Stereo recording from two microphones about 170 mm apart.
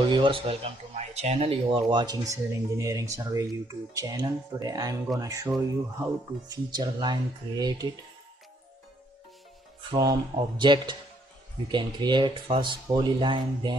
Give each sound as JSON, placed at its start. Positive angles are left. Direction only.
{"t": 0.0, "sound": "speech", "side_deg": -30}
{"t": 6.5, "sound": "speech", "side_deg": -25}
{"t": 9.8, "sound": "speech", "side_deg": -25}